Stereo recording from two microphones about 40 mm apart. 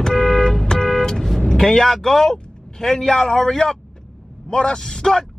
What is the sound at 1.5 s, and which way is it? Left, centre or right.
Speech, centre.